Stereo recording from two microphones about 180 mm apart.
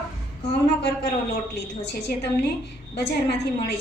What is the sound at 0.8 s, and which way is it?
A woman's voice, 65° left (ahead or behind).